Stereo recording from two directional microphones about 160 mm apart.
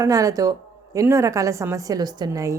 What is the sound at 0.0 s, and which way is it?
A woman's voice, 20° right (ahead or behind).